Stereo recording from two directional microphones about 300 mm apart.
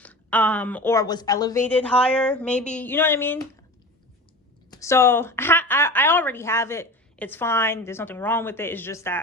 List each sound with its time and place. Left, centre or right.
0.0 s a woman's voice: centre
4.7 s a woman's voice: centre